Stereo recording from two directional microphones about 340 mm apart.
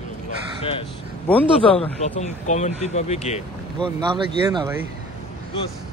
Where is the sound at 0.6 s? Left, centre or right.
Centre.